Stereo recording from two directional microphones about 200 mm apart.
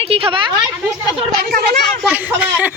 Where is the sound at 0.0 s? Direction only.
30° right (ahead or behind).